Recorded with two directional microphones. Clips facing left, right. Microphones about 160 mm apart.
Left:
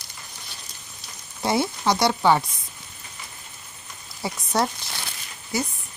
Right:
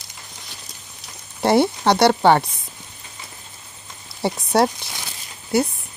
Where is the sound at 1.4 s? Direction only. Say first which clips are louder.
Right 7 dB; 65° right (ahead or behind).